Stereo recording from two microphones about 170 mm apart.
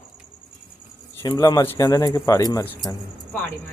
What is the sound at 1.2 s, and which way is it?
Speech, 20° left (ahead or behind).